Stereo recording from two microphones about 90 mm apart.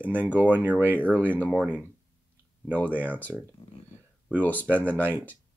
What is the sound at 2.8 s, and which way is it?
Speech, 20° right (ahead or behind).